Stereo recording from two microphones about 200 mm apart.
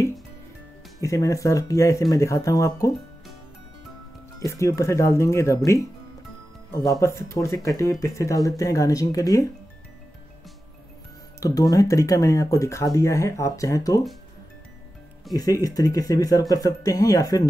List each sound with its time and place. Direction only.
1.0 s speech: 15° left (ahead or behind)
4.4 s speech: 15° left (ahead or behind)
6.7 s speech: 15° left (ahead or behind)
11.3 s speech: 15° left (ahead or behind)
15.3 s speech: 20° left (ahead or behind)